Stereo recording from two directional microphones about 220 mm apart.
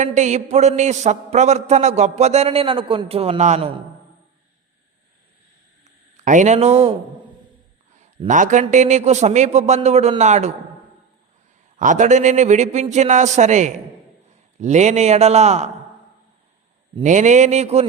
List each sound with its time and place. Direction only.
0.0 s a man's voice: 35° right (ahead or behind)
5.8 s a sound: 35° right (ahead or behind)
7.9 s a man's voice: 35° right (ahead or behind)
11.8 s a man's voice: 35° right (ahead or behind)
16.9 s a man's voice: 35° right (ahead or behind)